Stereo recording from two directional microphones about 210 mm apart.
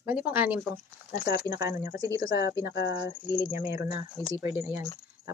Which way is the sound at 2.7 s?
50° left (ahead or behind).